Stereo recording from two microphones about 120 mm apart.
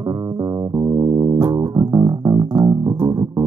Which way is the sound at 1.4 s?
30° right (ahead or behind).